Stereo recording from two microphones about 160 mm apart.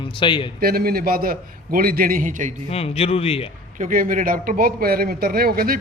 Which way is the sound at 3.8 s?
55° right (ahead or behind).